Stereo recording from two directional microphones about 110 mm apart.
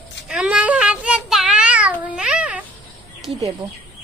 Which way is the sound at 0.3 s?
10° right (ahead or behind).